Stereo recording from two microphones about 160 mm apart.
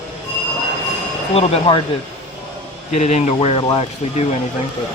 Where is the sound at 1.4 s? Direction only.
35° left (ahead or behind).